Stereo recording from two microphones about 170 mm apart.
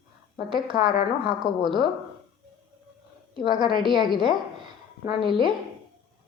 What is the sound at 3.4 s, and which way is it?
A woman's voice, 25° right (ahead or behind).